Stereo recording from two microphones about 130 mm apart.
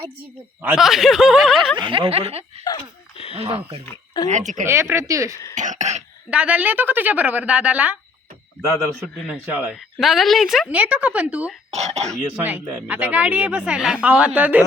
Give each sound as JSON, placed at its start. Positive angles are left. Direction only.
{"t": 0.8, "sound": "speech", "side_deg": 0}
{"t": 1.7, "sound": "snicker", "side_deg": -40}
{"t": 2.7, "sound": "a sound", "side_deg": 50}
{"t": 3.3, "sound": "snicker", "side_deg": -50}
{"t": 4.3, "sound": "a woman's voice", "side_deg": -70}
{"t": 4.6, "sound": "speech", "side_deg": -20}
{"t": 5.5, "sound": "throat clearing", "side_deg": -70}
{"t": 6.3, "sound": "a woman's voice", "side_deg": -10}
{"t": 9.2, "sound": "a woman's voice", "side_deg": -10}
{"t": 11.7, "sound": "speech", "side_deg": -55}
{"t": 12.1, "sound": "a woman's voice", "side_deg": -15}